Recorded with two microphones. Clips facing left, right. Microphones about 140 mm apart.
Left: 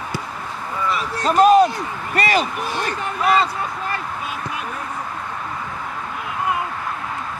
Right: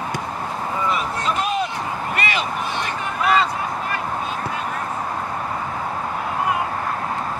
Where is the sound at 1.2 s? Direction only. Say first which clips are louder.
Left 14 dB; 40° left (ahead or behind).